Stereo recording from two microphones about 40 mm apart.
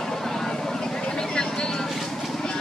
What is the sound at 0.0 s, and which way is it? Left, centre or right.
Vehicle, centre.